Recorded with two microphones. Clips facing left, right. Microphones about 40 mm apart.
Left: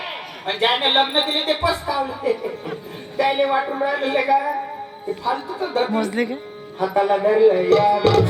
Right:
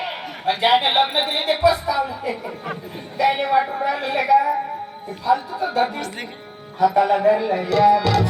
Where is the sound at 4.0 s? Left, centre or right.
Left.